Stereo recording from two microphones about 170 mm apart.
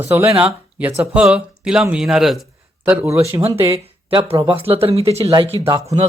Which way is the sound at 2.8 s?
15° right (ahead or behind).